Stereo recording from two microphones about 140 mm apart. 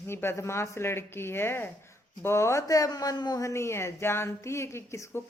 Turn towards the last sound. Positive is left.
turn(degrees=20)  # may be behind; listen again after turning